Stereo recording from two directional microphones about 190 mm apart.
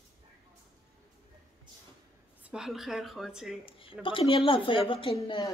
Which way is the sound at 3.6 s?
30° left (ahead or behind).